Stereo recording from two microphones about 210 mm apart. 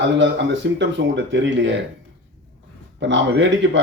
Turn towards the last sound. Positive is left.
turn(degrees=-60)  # may be behind; listen again after turning